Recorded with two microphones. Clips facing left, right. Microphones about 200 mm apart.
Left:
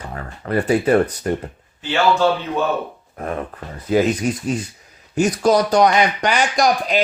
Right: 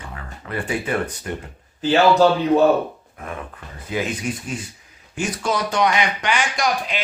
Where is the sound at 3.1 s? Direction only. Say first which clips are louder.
Left 11 dB; 40° left (ahead or behind).